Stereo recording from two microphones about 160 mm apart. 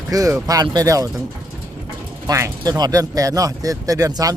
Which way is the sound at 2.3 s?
20° right (ahead or behind).